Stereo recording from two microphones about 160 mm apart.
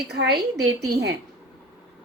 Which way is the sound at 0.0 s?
85° right.